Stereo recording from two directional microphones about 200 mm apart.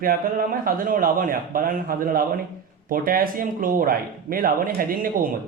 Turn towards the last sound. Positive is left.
turn(degrees=-45)  # may be behind; listen again after turning